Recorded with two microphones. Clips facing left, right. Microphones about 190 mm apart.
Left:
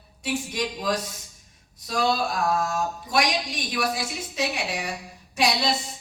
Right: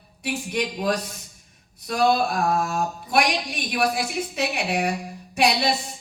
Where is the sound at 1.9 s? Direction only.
55° right (ahead or behind).